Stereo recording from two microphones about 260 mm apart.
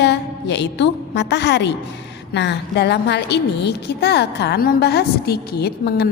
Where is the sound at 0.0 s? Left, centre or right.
Left.